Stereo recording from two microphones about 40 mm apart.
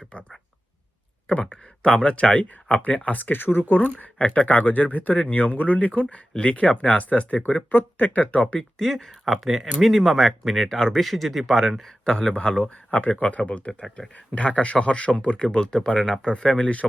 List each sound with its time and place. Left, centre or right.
0.1 s speech: left
1.5 s speech: left
3.4 s speech: left
4.4 s speech: left
7.7 s speech: left
8.5 s speech: centre
10.8 s speech: centre
11.0 s speech: centre
12.0 s speech: left
15.4 s speech: centre